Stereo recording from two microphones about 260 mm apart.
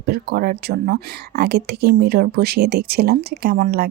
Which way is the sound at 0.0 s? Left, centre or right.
Right.